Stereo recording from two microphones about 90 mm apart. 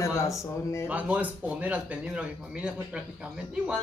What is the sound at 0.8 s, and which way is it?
Speech, 15° right (ahead or behind).